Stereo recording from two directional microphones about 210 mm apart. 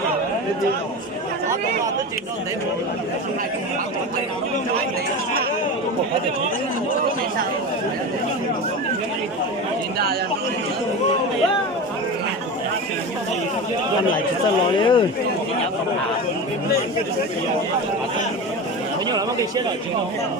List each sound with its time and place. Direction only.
14.8 s speech: 25° left (ahead or behind)